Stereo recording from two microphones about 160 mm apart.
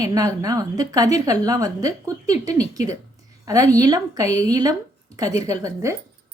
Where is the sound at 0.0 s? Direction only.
20° right (ahead or behind).